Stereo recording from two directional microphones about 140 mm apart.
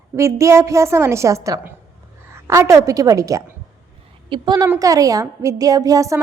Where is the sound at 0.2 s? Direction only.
20° right (ahead or behind).